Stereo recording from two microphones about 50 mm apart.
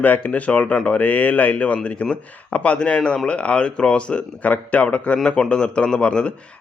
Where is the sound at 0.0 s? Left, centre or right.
Left.